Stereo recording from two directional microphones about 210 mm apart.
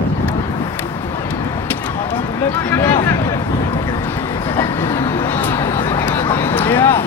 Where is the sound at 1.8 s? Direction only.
10° left (ahead or behind).